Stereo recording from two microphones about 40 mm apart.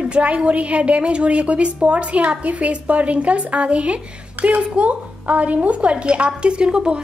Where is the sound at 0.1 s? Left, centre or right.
Right.